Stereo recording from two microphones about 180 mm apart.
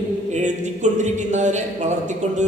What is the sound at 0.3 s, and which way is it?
Speech, 40° right (ahead or behind).